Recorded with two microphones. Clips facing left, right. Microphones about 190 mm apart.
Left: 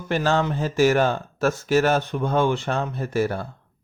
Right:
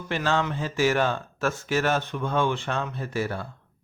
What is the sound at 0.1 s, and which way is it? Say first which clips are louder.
Speech: left 4 dB; 40° left (ahead or behind).